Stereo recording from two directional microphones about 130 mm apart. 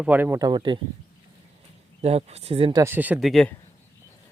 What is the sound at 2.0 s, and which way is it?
Speech, 55° right (ahead or behind).